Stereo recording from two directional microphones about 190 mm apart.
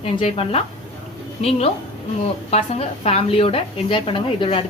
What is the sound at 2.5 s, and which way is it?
A woman's voice, 35° left (ahead or behind).